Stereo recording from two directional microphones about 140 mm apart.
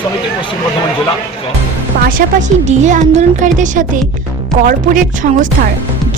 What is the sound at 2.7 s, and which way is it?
Speech, 60° right (ahead or behind).